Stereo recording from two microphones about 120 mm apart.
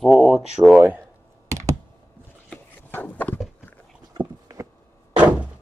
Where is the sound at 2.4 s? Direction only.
15° left (ahead or behind).